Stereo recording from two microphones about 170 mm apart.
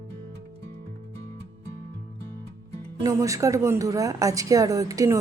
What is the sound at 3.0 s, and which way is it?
A woman's voice, 20° right (ahead or behind).